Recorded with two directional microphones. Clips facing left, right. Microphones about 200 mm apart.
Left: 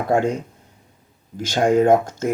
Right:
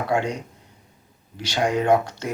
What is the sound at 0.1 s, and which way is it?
Speech, 45° left (ahead or behind).